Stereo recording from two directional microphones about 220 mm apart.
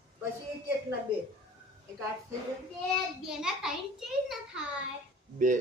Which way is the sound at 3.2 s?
Centre (ahead or behind).